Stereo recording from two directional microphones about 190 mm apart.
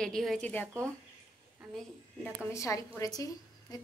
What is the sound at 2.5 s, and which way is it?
Speech, 15° left (ahead or behind).